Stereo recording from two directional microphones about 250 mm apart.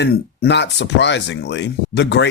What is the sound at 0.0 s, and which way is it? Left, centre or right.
Speech, left.